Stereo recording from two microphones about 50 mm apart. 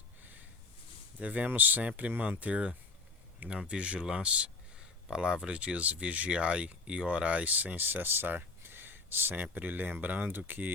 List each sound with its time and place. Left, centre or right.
1.2 s speech: right